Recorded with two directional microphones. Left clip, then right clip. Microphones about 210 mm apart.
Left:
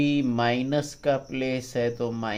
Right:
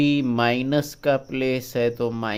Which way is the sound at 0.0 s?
40° right (ahead or behind).